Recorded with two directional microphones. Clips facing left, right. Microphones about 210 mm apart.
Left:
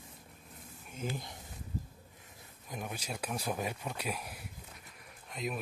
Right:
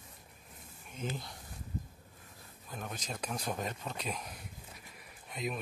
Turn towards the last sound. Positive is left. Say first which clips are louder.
# even
turn(degrees=0)  # may be behind; listen again after turning